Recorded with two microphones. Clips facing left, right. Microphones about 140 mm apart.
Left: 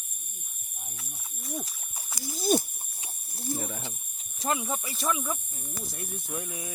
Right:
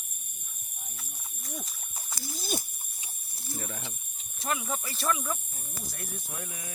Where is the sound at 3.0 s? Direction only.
45° left (ahead or behind).